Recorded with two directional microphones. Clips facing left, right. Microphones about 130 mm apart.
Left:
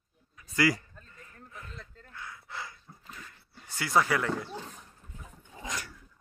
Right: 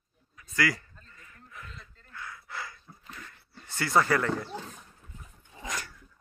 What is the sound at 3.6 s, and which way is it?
Speech, 10° left (ahead or behind).